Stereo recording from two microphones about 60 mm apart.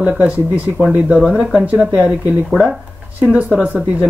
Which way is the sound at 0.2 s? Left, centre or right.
Right.